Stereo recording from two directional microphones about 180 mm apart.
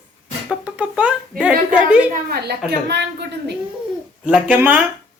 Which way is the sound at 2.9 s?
70° right (ahead or behind).